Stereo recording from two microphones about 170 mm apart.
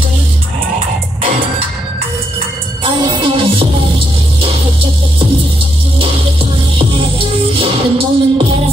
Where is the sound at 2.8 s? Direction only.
25° right (ahead or behind).